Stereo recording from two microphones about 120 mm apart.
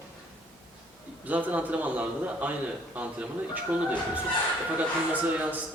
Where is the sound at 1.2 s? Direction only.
15° right (ahead or behind).